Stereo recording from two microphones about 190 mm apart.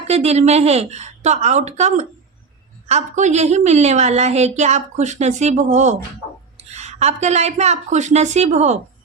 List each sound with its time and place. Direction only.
0.1 s a woman's voice: 35° right (ahead or behind)